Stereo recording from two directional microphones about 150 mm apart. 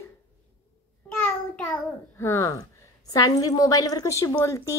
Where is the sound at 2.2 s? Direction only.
20° left (ahead or behind).